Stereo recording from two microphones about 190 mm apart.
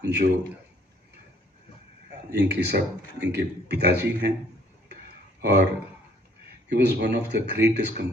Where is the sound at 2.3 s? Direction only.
60° right (ahead or behind).